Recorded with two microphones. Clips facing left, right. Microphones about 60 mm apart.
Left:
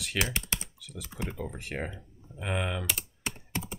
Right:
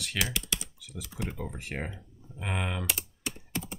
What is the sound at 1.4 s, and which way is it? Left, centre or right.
Speech, centre.